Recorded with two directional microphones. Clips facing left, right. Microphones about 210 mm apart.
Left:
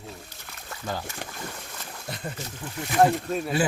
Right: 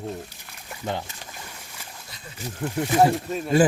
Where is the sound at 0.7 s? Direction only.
20° right (ahead or behind).